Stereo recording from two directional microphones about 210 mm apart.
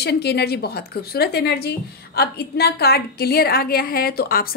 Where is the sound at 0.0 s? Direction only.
50° left (ahead or behind).